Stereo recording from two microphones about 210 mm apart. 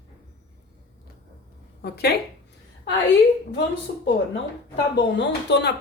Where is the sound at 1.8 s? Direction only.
50° left (ahead or behind).